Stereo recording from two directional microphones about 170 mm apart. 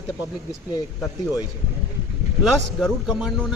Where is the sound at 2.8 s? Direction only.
Centre (ahead or behind).